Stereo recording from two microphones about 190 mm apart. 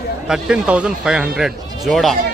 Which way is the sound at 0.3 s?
5° right (ahead or behind).